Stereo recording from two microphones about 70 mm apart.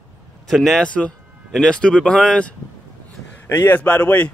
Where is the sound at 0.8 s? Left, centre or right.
Centre.